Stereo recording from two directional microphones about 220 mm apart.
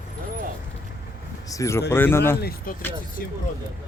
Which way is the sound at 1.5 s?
15° left (ahead or behind).